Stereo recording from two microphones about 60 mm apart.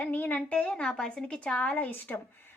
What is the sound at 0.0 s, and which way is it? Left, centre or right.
A woman's voice, left.